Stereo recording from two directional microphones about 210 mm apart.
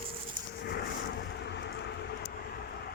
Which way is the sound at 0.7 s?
50° left (ahead or behind).